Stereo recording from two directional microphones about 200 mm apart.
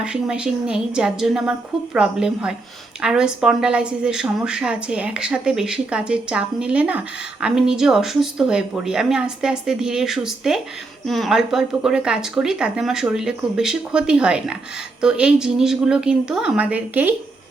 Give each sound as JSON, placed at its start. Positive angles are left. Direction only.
{"t": 0.0, "sound": "a woman's voice", "side_deg": -5}